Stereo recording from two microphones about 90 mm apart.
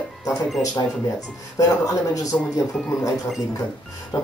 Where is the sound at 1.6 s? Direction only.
40° left (ahead or behind).